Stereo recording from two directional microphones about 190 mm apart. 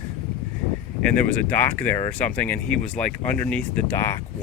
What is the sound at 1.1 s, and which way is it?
Speech, 5° left (ahead or behind).